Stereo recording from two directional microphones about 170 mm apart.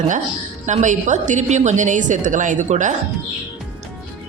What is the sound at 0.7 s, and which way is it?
A woman's voice, 45° right (ahead or behind).